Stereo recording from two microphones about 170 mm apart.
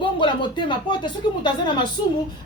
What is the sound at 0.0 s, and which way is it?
A woman's voice, 30° left (ahead or behind).